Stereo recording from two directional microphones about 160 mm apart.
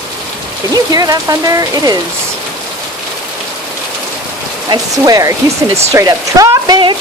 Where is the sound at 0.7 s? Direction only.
25° right (ahead or behind).